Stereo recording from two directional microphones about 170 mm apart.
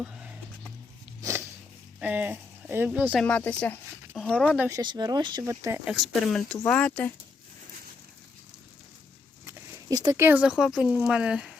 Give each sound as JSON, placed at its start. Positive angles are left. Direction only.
{"t": 0.0, "sound": "a sound", "side_deg": -5}
{"t": 2.0, "sound": "speech", "side_deg": -10}
{"t": 3.2, "sound": "speech", "side_deg": 10}
{"t": 4.7, "sound": "speech", "side_deg": -25}
{"t": 5.8, "sound": "speech", "side_deg": -5}
{"t": 9.5, "sound": "speech", "side_deg": -20}